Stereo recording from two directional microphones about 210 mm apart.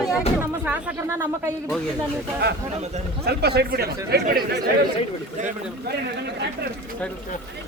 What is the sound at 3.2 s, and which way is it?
Speech, 50° right (ahead or behind).